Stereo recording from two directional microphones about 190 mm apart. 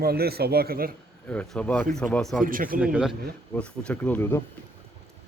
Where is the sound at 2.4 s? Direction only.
50° right (ahead or behind).